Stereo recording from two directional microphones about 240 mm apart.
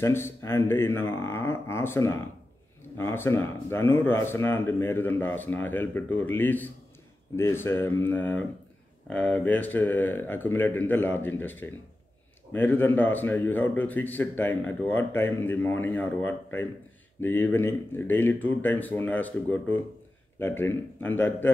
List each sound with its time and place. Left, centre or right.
0.0 s a man's voice: centre